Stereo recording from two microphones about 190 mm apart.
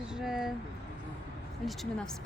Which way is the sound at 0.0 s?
5° right (ahead or behind).